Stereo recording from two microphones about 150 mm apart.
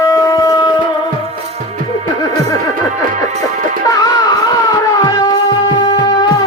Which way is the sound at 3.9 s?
25° left (ahead or behind).